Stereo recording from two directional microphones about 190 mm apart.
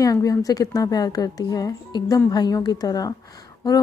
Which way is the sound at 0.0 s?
20° left (ahead or behind).